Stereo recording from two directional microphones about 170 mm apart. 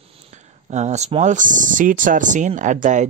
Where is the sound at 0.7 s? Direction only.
45° right (ahead or behind).